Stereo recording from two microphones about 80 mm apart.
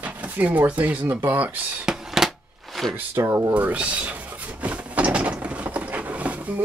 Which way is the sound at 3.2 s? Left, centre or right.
Right.